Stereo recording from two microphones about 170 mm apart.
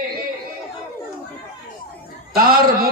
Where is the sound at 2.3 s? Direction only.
60° right (ahead or behind).